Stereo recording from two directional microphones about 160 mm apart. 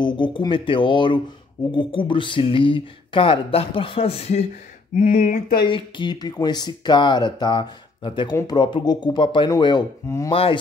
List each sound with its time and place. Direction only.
0.0 s speech: 30° left (ahead or behind)
4.9 s speech: 55° left (ahead or behind)
5.7 s speech: 30° left (ahead or behind)
10.3 s speech: 35° left (ahead or behind)